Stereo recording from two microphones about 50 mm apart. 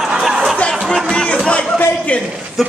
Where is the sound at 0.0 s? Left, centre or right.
Centre.